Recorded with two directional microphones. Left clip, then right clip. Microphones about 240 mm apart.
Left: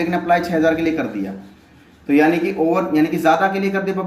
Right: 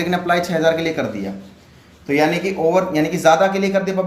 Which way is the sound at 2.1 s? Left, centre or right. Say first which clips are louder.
Left 2 dB; right.